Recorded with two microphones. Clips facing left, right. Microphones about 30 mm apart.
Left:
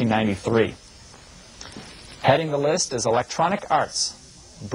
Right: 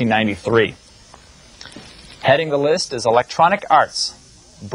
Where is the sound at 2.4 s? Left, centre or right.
Right.